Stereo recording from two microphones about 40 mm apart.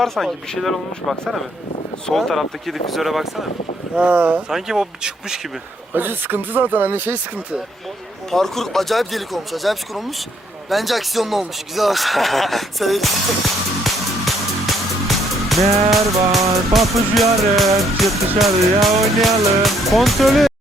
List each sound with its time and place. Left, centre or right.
0.0 s speech: centre
2.2 s speech: centre
3.9 s speech: right
4.4 s speech: centre
5.9 s speech: right
8.3 s speech: centre